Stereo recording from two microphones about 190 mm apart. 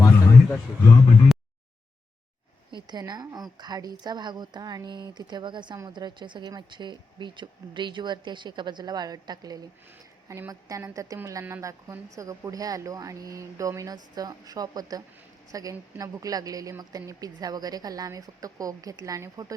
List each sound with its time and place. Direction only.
2.7 s a woman's voice: 20° right (ahead or behind)